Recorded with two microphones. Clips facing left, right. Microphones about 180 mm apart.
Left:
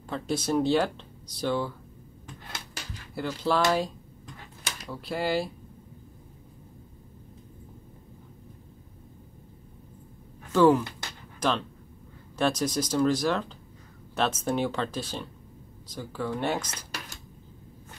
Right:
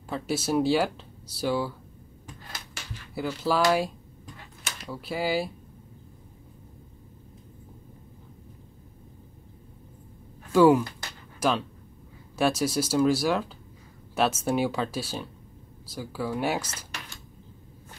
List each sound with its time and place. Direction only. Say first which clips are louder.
0.1 s speech: right 1 dB; 5° right (ahead or behind)
3.2 s speech: right 1 dB; 5° right (ahead or behind)
10.5 s speech: right 2 dB; 10° right (ahead or behind)